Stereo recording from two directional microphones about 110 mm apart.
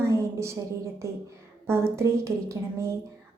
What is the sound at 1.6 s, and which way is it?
Speech, 25° right (ahead or behind).